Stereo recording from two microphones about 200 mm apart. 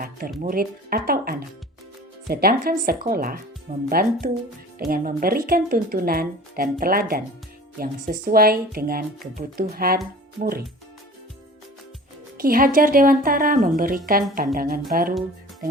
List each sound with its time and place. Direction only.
0.4 s speech: 45° right (ahead or behind)
12.4 s speech: 45° right (ahead or behind)